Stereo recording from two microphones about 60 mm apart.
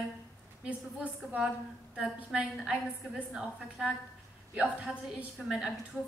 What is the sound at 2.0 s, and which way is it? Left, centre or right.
A woman's voice, right.